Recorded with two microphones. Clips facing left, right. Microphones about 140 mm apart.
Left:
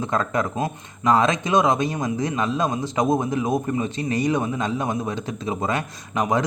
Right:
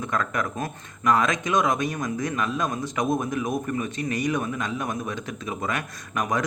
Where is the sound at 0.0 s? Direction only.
30° left (ahead or behind).